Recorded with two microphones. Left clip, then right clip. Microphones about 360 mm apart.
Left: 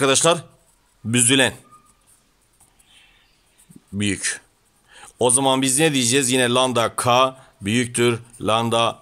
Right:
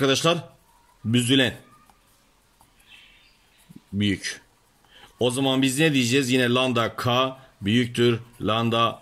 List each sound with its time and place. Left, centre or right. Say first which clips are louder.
0.0 s a man's voice: left 4 dB; centre
4.0 s a man's voice: left 3 dB; centre